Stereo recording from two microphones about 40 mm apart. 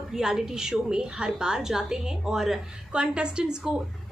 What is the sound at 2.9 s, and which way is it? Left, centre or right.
Speech, right.